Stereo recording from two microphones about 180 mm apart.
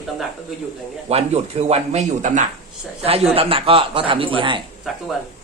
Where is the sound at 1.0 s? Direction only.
35° right (ahead or behind).